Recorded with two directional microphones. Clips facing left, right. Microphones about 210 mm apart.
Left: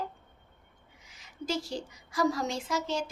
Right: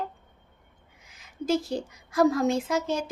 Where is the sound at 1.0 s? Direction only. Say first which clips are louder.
Right 7 dB; 55° right (ahead or behind).